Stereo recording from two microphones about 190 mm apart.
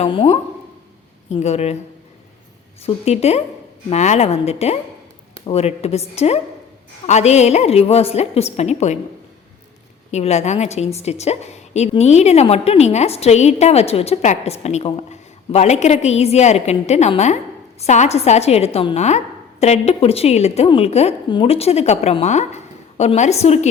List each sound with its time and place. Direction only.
0.0 s a woman's voice: 30° left (ahead or behind)
2.8 s a woman's voice: 35° left (ahead or behind)
10.1 s a woman's voice: 35° left (ahead or behind)